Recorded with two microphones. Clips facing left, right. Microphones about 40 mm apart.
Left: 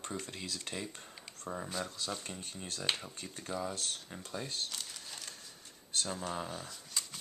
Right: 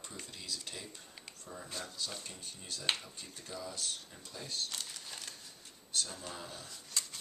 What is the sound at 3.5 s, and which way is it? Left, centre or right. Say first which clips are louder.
Speech: left 6 dB; left.